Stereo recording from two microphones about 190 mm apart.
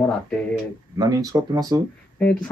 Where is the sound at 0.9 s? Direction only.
20° right (ahead or behind).